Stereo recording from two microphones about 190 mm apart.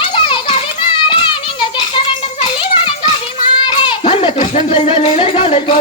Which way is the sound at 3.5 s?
25° left (ahead or behind).